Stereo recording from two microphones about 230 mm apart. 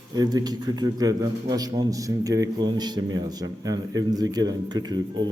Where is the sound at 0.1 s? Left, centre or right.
Centre.